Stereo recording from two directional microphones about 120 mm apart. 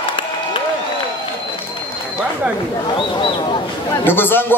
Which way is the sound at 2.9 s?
45° left (ahead or behind).